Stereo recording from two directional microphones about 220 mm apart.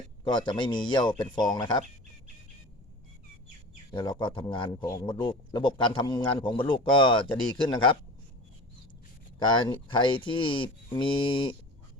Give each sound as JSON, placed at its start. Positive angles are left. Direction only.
{"t": 0.3, "sound": "a man's voice", "side_deg": 20}
{"t": 3.9, "sound": "a man's voice", "side_deg": 20}
{"t": 9.6, "sound": "a man's voice", "side_deg": 20}